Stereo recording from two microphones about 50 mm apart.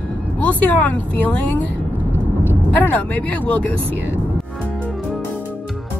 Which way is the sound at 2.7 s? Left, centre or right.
Left.